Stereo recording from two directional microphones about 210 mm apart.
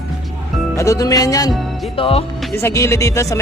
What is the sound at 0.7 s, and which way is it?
Speech, 15° left (ahead or behind).